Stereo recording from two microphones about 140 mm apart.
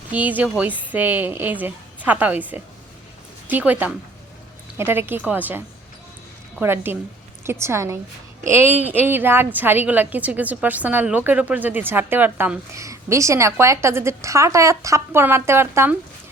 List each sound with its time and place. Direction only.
0.1 s a woman's voice: 10° right (ahead or behind)